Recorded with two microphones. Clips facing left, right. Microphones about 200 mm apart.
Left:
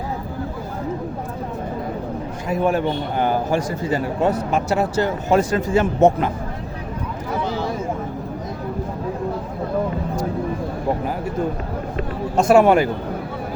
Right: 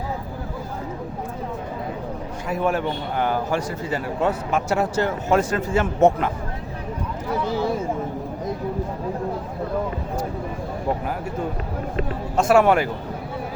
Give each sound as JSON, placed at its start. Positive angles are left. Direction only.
{"t": 2.6, "sound": "a man's voice", "side_deg": 35}
{"t": 12.4, "sound": "speech", "side_deg": 15}